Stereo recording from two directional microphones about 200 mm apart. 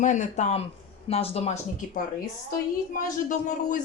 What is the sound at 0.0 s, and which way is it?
A woman's voice, 40° left (ahead or behind).